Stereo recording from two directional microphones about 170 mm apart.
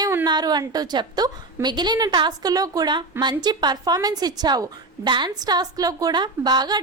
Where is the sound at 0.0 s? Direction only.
15° right (ahead or behind).